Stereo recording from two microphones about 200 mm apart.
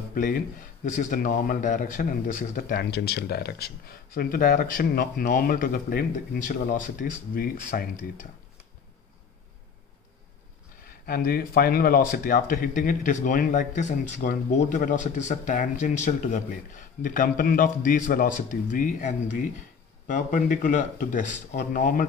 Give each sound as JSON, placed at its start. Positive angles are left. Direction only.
{"t": 0.1, "sound": "speech", "side_deg": 45}
{"t": 11.1, "sound": "speech", "side_deg": 45}